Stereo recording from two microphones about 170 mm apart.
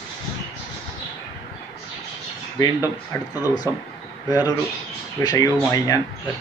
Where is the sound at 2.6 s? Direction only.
20° left (ahead or behind).